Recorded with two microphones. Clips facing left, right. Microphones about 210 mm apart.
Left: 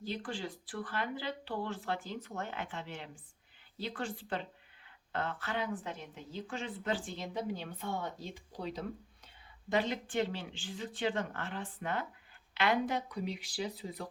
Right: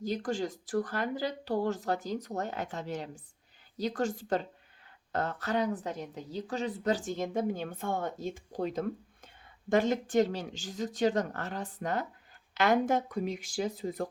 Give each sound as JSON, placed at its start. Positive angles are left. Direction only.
{"t": 0.0, "sound": "a woman's voice", "side_deg": -45}